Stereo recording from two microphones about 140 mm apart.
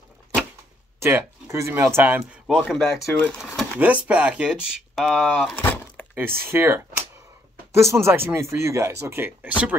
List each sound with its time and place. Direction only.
0.9 s speech: 20° right (ahead or behind)
2.4 s speech: centre (ahead or behind)
3.1 s speech: 10° left (ahead or behind)
3.7 s speech: 10° right (ahead or behind)
5.6 s a sound: 15° left (ahead or behind)
6.1 s speech: 15° right (ahead or behind)